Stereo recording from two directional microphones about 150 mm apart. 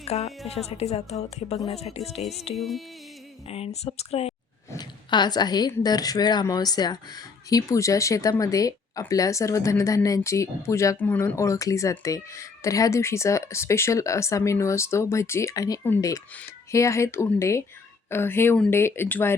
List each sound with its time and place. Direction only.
0.0 s speech: 45° left (ahead or behind)
2.6 s music: centre (ahead or behind)
3.5 s speech: 40° left (ahead or behind)
4.7 s a woman's voice: 30° left (ahead or behind)